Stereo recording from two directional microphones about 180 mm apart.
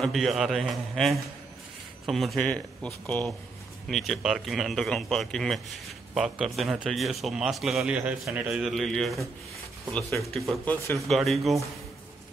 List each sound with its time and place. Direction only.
0.0 s a man's voice: centre (ahead or behind)
9.9 s a man's voice: 15° left (ahead or behind); by 11.5 s centre (ahead or behind)